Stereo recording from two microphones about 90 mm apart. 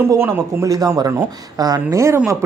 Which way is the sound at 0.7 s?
45° right (ahead or behind).